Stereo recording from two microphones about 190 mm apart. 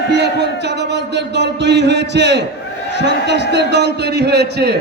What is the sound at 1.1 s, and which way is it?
A man's voice, 65° right (ahead or behind).